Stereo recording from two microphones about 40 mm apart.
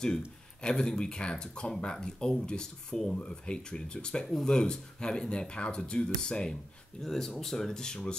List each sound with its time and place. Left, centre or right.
0.6 s speech: centre
3.2 s speech: left